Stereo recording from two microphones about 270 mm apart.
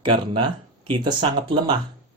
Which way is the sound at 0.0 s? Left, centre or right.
Centre.